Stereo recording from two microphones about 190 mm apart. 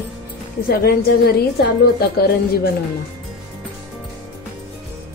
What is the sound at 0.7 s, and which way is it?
A woman's voice, 55° left (ahead or behind).